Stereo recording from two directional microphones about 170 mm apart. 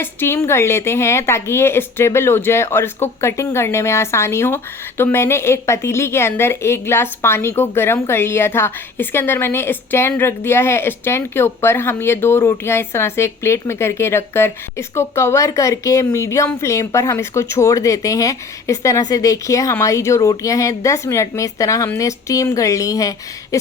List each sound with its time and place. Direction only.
0.0 s a woman's voice: 15° left (ahead or behind)